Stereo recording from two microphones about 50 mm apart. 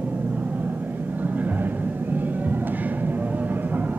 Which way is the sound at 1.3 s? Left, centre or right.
Right.